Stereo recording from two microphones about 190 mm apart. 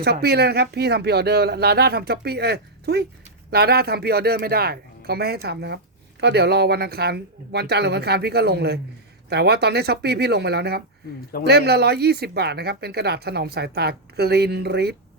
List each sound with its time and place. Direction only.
0.0 s speech: 55° right (ahead or behind)